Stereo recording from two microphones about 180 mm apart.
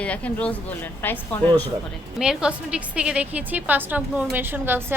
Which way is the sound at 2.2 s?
5° right (ahead or behind).